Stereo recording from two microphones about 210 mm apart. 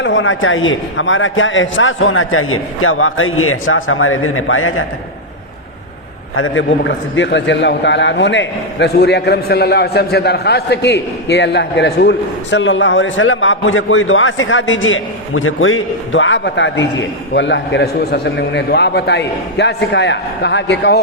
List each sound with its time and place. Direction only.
0.0 s a man's voice: 65° left (ahead or behind)
6.3 s a man's voice: 70° left (ahead or behind); by 21.0 s 55° left (ahead or behind)